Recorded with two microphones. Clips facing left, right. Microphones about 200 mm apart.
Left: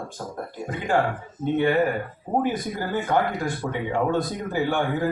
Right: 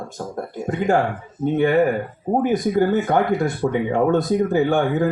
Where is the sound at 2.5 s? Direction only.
40° right (ahead or behind).